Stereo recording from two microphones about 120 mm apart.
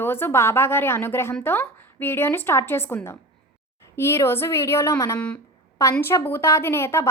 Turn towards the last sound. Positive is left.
turn(degrees=20)  # may be behind; listen again after turning